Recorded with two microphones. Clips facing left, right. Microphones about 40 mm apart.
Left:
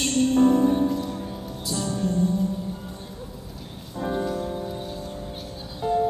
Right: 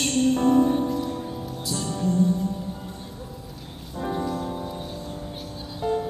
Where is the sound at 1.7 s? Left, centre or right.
Left.